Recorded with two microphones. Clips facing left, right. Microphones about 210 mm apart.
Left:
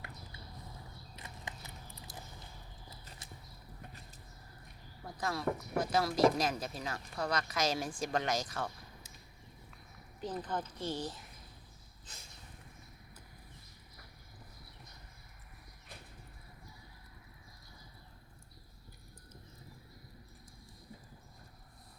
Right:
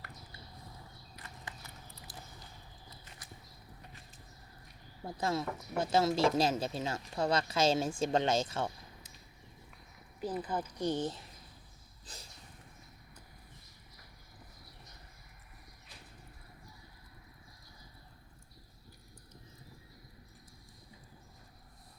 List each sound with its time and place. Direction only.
1.1 s horse: 20° left (ahead or behind)
3.2 s horse: 25° left (ahead or behind)
5.0 s speech: 25° right (ahead or behind)
10.2 s speech: 10° right (ahead or behind)
12.1 s speech: 35° right (ahead or behind)